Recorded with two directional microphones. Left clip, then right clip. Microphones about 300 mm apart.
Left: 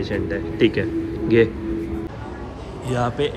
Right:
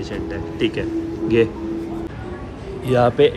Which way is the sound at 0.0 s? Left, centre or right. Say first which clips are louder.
Left 2 dB; centre.